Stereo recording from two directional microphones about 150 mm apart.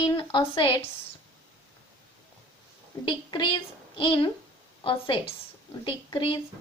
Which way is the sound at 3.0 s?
30° left (ahead or behind).